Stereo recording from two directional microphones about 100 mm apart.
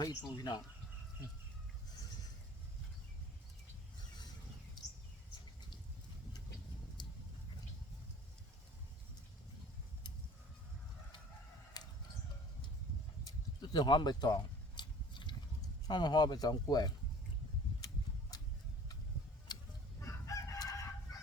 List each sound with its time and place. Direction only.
0.0 s speech: 45° left (ahead or behind)
11.8 s chicken: 45° left (ahead or behind)
13.2 s a sound: 50° left (ahead or behind)
15.9 s speech: 50° left (ahead or behind)
18.3 s a sound: 40° left (ahead or behind)
20.0 s chicken: 30° left (ahead or behind)